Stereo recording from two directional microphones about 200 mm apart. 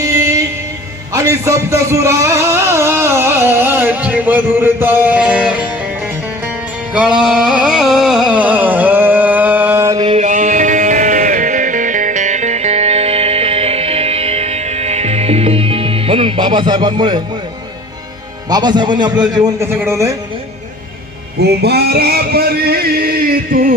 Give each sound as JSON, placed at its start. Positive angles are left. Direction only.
{"t": 0.0, "sound": "music", "side_deg": -15}
{"t": 1.1, "sound": "a man's voice", "side_deg": -15}
{"t": 6.9, "sound": "music", "side_deg": -5}
{"t": 10.2, "sound": "music", "side_deg": -40}
{"t": 18.4, "sound": "a man's voice", "side_deg": -20}
{"t": 21.3, "sound": "a sound", "side_deg": -55}